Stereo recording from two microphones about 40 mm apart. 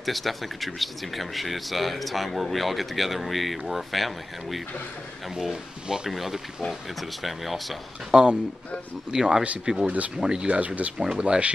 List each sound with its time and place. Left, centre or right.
0.0 s speech: centre
5.3 s speech: centre
8.1 s speech: centre
9.8 s speech: right
10.1 s speech: centre
10.4 s speech: right
11.0 s speech: right